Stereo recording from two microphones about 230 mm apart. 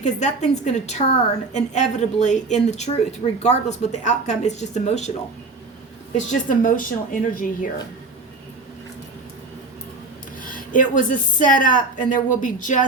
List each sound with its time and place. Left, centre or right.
0.0 s speech: left
6.1 s speech: left
10.4 s speech: left